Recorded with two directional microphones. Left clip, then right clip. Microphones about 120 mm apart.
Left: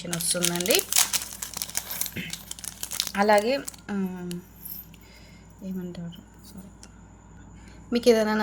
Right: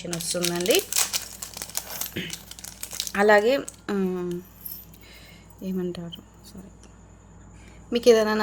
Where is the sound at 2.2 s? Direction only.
45° right (ahead or behind); by 4.3 s 65° right (ahead or behind).